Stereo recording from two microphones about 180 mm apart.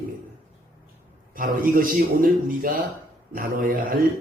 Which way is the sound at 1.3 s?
50° right (ahead or behind).